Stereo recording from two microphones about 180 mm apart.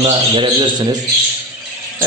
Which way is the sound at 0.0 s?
25° right (ahead or behind).